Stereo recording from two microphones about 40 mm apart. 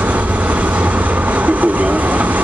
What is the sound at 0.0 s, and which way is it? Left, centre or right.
Train, right.